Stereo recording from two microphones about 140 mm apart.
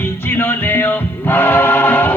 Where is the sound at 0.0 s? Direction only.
15° left (ahead or behind).